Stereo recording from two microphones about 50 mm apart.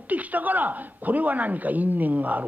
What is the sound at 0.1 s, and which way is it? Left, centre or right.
Speech, right.